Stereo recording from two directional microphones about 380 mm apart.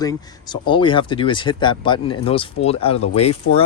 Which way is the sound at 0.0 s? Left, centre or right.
Centre.